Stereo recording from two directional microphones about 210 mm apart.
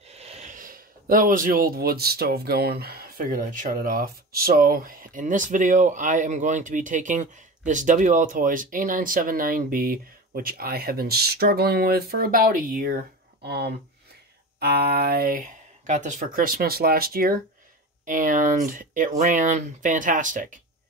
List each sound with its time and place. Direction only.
0.1 s speech: 30° right (ahead or behind)